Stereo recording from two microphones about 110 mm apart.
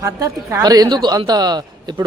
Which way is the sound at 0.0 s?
30° right (ahead or behind).